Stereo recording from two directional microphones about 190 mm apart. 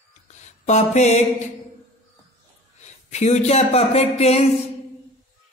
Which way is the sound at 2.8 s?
35° left (ahead or behind).